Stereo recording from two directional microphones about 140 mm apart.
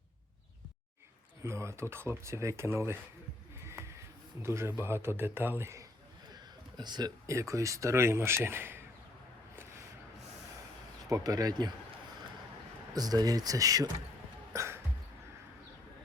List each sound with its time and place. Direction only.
1.5 s speech: 20° right (ahead or behind)
3.6 s music: 20° right (ahead or behind)
4.4 s a man's voice: 20° right (ahead or behind)
6.3 s speech: 30° right (ahead or behind)
11.1 s speech: 25° right (ahead or behind)
12.9 s speech: 25° right (ahead or behind)
14.5 s a sound: 20° right (ahead or behind)